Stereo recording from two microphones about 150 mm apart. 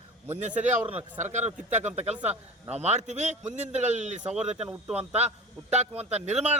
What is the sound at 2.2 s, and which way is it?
Speech, 10° right (ahead or behind).